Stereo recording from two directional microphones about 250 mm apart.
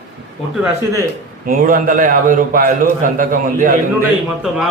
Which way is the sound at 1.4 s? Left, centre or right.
Right.